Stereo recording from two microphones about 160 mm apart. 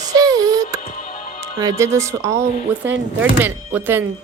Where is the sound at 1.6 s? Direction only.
20° right (ahead or behind).